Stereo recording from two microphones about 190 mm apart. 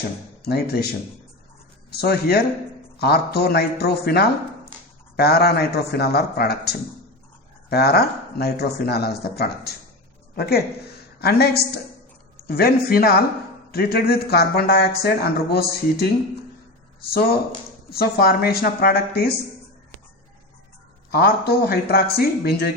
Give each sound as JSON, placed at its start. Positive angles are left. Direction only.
{"t": 0.4, "sound": "speech", "side_deg": 55}
{"t": 1.9, "sound": "a woman's voice", "side_deg": 55}
{"t": 17.9, "sound": "a woman's voice", "side_deg": 55}
{"t": 21.1, "sound": "a woman's voice", "side_deg": 55}